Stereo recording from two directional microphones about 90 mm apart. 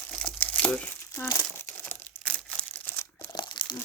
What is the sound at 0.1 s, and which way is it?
Crumpling, 15° left (ahead or behind).